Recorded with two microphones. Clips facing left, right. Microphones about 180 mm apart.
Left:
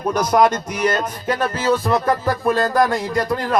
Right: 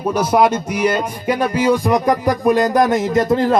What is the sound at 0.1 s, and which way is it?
Music, 10° right (ahead or behind).